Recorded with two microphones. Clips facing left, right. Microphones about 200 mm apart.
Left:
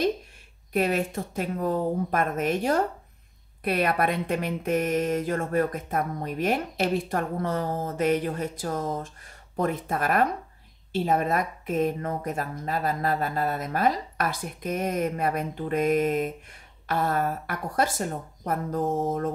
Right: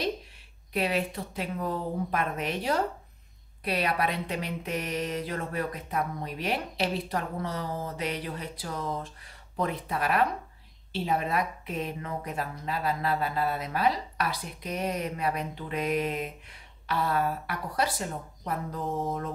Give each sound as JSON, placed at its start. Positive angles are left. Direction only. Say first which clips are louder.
{"t": 0.7, "sound": "speech", "louder": "left 4 dB", "side_deg": 45}